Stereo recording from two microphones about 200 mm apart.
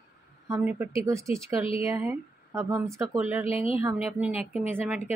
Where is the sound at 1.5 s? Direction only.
30° left (ahead or behind).